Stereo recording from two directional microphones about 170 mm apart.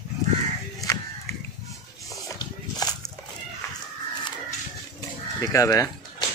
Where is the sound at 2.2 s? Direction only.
20° left (ahead or behind).